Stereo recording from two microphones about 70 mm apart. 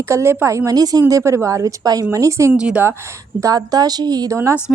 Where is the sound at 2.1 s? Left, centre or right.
Right.